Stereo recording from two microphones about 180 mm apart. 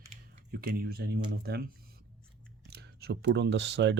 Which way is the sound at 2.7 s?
65° right (ahead or behind).